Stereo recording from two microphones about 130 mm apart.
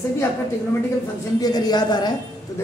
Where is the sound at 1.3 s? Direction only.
30° left (ahead or behind).